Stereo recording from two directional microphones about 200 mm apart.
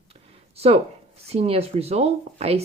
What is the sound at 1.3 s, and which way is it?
Speech, 30° right (ahead or behind).